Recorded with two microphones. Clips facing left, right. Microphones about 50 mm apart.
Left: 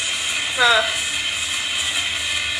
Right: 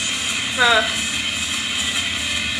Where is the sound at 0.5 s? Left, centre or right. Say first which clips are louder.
Right 1 dB; centre.